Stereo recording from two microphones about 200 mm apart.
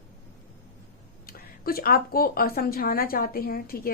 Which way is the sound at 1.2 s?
50° left (ahead or behind).